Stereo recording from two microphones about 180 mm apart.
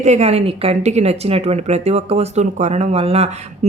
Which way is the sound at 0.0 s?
40° right (ahead or behind).